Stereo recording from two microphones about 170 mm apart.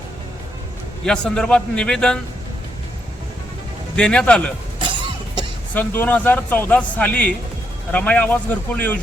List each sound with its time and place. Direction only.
1.0 s a man's voice: 5° left (ahead or behind)
3.9 s a man's voice: 5° left (ahead or behind)
4.8 s cough: 30° right (ahead or behind)
5.7 s a man's voice: 10° left (ahead or behind)